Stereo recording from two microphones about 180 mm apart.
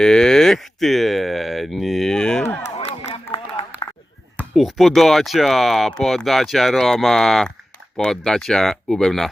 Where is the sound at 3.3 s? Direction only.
25° left (ahead or behind).